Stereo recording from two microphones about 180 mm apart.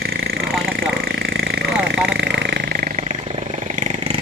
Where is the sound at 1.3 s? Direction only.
65° right (ahead or behind).